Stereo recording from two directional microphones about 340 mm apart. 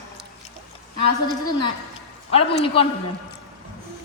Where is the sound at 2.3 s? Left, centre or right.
Centre.